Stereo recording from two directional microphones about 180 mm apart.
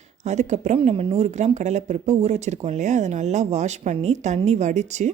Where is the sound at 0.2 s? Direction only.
40° right (ahead or behind).